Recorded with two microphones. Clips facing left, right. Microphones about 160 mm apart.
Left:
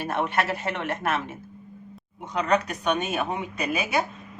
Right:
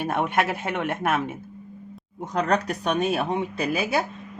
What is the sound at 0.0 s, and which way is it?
A man's voice, 50° right (ahead or behind).